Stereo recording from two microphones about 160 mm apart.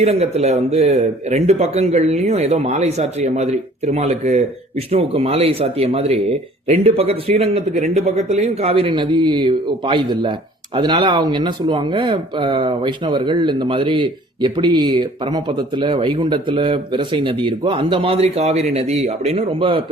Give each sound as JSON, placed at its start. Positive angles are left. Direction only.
{"t": 0.0, "sound": "speech", "side_deg": -40}